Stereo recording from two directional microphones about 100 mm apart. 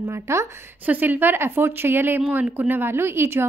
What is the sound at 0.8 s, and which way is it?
Speech, 15° right (ahead or behind).